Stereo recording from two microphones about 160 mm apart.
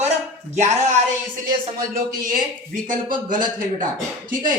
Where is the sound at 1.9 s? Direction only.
60° right (ahead or behind).